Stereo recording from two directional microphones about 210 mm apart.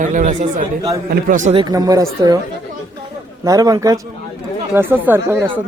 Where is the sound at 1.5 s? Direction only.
20° right (ahead or behind).